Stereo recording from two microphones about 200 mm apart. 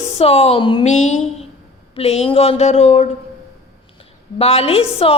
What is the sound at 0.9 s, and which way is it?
A woman's voice, 35° left (ahead or behind).